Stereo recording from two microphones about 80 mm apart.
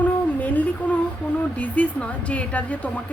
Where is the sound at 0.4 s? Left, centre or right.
Centre.